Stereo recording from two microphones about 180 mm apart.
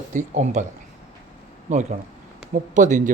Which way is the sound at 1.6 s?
40° right (ahead or behind).